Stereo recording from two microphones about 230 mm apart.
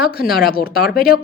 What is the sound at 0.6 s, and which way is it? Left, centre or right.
Speech, left.